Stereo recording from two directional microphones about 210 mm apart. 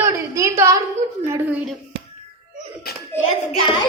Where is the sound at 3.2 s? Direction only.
25° left (ahead or behind).